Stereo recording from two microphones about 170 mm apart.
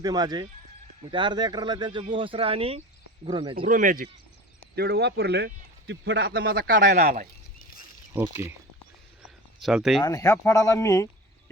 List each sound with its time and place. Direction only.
0.0 s speech: 25° right (ahead or behind)
3.6 s speech: 55° right (ahead or behind)
4.7 s speech: 75° right (ahead or behind); by 7.3 s 50° right (ahead or behind)
8.1 s speech: 15° right (ahead or behind)
9.6 s speech: centre (ahead or behind)
10.0 s speech: 20° left (ahead or behind)